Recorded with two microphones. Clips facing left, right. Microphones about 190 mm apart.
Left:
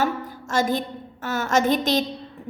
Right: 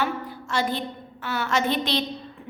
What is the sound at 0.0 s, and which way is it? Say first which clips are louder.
A woman's voice: left 3 dB; 45° left (ahead or behind).